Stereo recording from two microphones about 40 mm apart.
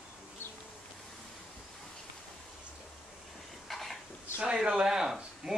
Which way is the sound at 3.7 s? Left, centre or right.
Centre.